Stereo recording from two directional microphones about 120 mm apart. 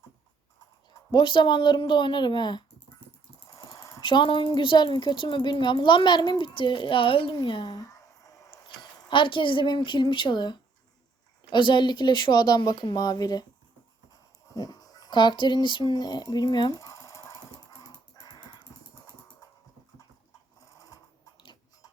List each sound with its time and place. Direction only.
1.1 s speech: 40° left (ahead or behind)
3.5 s jackhammer: 30° left (ahead or behind)
4.0 s speech: 40° left (ahead or behind)
8.6 s speech: 40° left (ahead or behind)
14.5 s a sound: 30° left (ahead or behind)
20.7 s sewing machine: 30° left (ahead or behind)